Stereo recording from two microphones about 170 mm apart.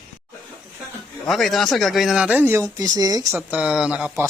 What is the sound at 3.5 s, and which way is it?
Speech, 5° right (ahead or behind).